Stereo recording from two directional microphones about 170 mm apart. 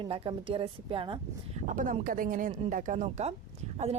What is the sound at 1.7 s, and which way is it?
A woman's voice, 50° right (ahead or behind).